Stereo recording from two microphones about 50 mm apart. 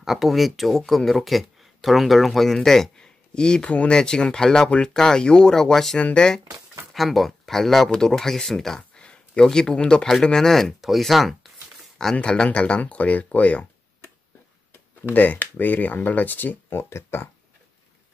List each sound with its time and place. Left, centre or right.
0.0 s speech: centre
5.9 s speech: left
6.9 s speech: centre
12.2 s speech: centre
15.1 s speech: left
16.7 s speech: left